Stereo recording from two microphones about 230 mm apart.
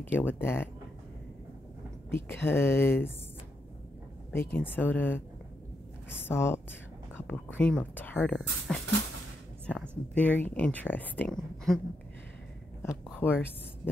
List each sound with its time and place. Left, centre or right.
0.2 s speech: centre
2.4 s speech: centre
4.3 s speech: centre
6.2 s speech: centre
12.8 s speech: centre